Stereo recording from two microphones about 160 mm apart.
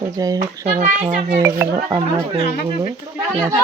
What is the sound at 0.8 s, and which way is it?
Speech, 50° right (ahead or behind).